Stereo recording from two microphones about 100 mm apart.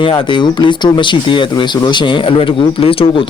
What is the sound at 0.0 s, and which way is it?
Speech, 55° left (ahead or behind).